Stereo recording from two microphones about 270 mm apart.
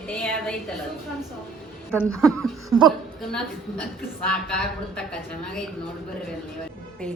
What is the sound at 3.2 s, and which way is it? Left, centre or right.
Speech, centre.